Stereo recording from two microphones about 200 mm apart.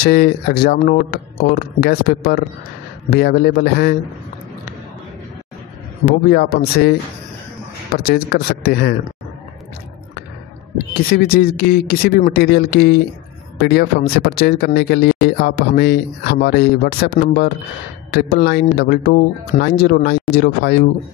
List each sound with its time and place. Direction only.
0.0 s speech: 50° left (ahead or behind)
6.0 s speech: 45° left (ahead or behind)
7.9 s speech: 50° left (ahead or behind)
11.1 s speech: 50° left (ahead or behind)